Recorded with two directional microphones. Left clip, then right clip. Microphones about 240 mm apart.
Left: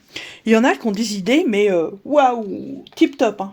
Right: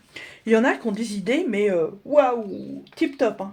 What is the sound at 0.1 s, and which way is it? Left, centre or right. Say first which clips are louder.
Speech: left 3 dB; left.